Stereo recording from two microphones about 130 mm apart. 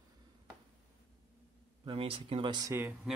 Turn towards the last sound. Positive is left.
turn(degrees=-20)  # may be behind; listen again after turning